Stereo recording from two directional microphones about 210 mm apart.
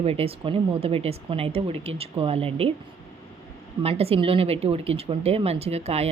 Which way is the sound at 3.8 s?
30° right (ahead or behind).